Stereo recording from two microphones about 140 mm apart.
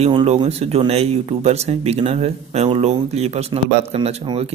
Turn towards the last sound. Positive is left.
turn(degrees=-40)  # may be behind; listen again after turning